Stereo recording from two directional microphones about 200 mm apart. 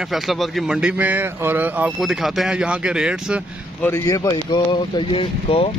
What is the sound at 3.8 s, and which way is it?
Speech, 15° left (ahead or behind).